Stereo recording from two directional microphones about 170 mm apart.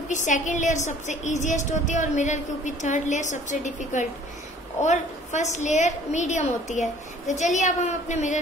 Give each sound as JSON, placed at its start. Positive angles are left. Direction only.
{"t": 0.1, "sound": "a woman's voice", "side_deg": 45}